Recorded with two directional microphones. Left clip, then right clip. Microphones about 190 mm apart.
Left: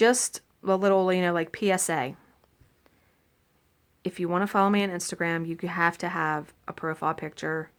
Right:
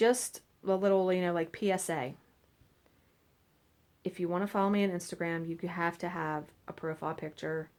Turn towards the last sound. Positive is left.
turn(degrees=30)  # may be behind; listen again after turning